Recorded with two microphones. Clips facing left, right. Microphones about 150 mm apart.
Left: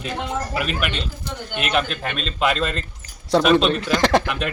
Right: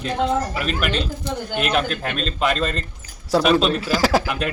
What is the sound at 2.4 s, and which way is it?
Speech, centre (ahead or behind).